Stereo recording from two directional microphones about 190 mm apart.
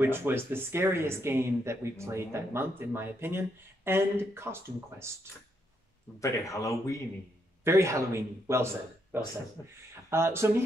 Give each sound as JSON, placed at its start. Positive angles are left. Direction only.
{"t": 0.0, "sound": "speech", "side_deg": -10}
{"t": 6.1, "sound": "speech", "side_deg": 15}
{"t": 7.6, "sound": "speech", "side_deg": -15}